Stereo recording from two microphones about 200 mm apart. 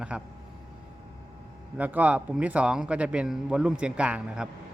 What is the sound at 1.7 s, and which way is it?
A man's voice, 10° right (ahead or behind).